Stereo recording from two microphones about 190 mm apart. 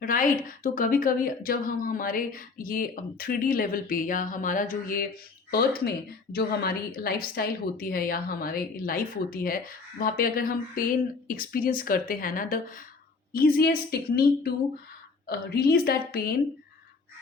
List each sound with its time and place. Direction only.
0.0 s speech: 45° left (ahead or behind)